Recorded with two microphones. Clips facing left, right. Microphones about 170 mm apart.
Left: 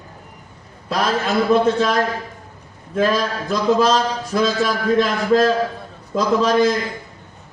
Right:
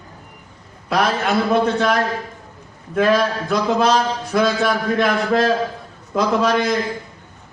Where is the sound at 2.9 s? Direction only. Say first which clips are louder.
Right 2 dB; 60° right (ahead or behind).